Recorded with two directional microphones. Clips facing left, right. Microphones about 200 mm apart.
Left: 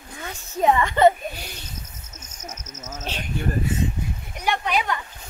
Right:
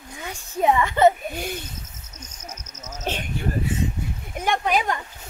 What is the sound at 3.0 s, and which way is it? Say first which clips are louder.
Speech: right 5 dB; 55° right (ahead or behind).